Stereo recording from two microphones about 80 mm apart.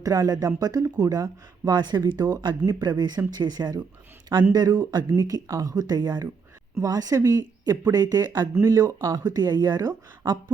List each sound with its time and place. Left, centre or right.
0.0 s speech: right
8.5 s speech: right